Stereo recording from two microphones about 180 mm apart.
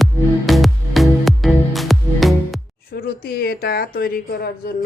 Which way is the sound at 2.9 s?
60° left (ahead or behind).